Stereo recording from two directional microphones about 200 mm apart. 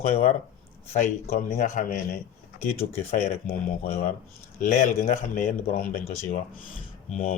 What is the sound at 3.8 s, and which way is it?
A man's voice, 30° left (ahead or behind).